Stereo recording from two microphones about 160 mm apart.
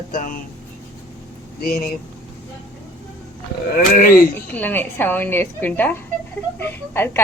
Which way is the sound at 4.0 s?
65° left (ahead or behind).